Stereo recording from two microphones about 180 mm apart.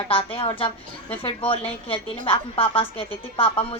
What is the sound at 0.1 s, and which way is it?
A woman's voice, 30° left (ahead or behind).